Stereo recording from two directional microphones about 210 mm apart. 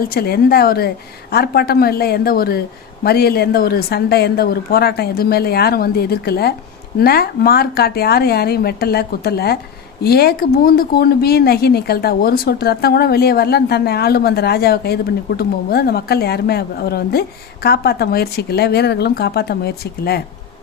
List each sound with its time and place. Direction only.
0.0 s speech: 50° left (ahead or behind)